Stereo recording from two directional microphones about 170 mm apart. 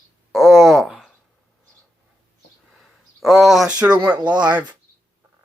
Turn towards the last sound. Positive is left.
turn(degrees=-10)  # may be behind; listen again after turning